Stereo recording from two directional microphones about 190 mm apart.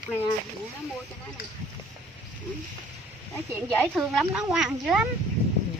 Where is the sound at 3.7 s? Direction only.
Centre (ahead or behind).